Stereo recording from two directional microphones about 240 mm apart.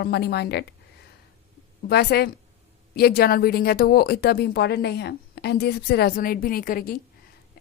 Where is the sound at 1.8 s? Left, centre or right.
Left.